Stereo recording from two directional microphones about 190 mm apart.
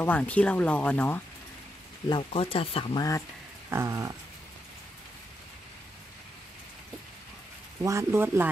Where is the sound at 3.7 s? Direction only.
15° right (ahead or behind).